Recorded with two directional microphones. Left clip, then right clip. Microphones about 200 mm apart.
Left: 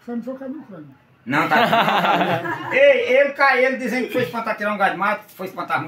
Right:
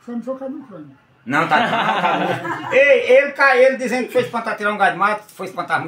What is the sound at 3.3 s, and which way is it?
Speech, 30° right (ahead or behind).